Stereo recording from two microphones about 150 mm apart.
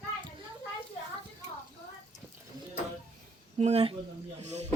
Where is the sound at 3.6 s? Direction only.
45° right (ahead or behind).